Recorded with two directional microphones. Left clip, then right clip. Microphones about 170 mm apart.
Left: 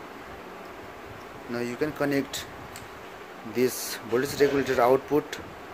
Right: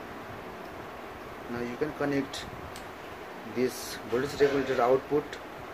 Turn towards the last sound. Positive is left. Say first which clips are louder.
# left 3 dB
turn(degrees=50)  # may be behind; listen again after turning